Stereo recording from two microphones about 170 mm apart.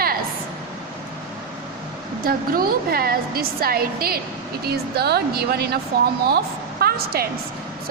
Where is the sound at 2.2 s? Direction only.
60° right (ahead or behind).